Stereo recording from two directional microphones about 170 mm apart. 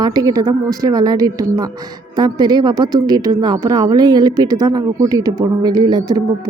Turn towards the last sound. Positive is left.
turn(degrees=-25)  # may be behind; listen again after turning